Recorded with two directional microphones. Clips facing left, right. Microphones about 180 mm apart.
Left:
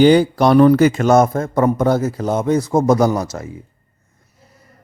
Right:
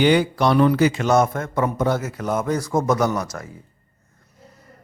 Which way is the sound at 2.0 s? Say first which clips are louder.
Left 5 dB; 30° left (ahead or behind).